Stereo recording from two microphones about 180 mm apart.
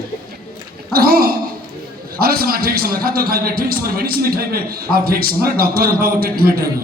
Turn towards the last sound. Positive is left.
turn(degrees=-55)  # may be behind; listen again after turning